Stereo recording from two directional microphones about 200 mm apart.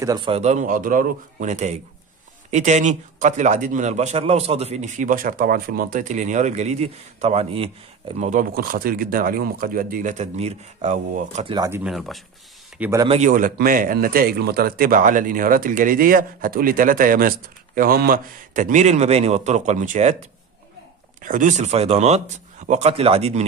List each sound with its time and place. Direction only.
0.0 s a man's voice: 25° right (ahead or behind)
11.5 s speech: 15° right (ahead or behind)
11.8 s speech: centre (ahead or behind)
13.2 s a man's voice: 40° right (ahead or behind)